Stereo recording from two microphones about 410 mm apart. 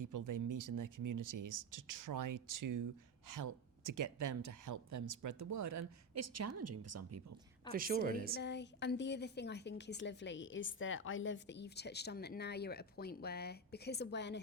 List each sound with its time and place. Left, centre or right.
0.0 s speech: right
7.7 s a woman's voice: right
8.3 s a woman's voice: left